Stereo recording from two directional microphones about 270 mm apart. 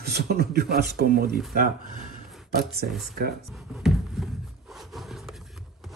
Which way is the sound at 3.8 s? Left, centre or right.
Centre.